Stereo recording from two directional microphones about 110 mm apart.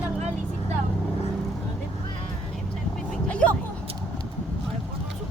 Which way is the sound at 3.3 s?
10° left (ahead or behind).